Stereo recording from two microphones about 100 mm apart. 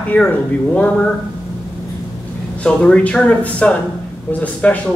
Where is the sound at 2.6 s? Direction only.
10° left (ahead or behind).